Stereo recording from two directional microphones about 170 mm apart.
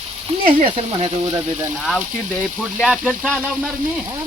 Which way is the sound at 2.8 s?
Centre (ahead or behind).